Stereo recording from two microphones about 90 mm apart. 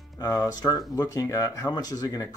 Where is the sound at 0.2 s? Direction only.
45° left (ahead or behind).